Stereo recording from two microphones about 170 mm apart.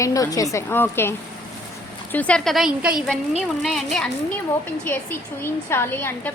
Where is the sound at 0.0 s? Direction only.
20° left (ahead or behind).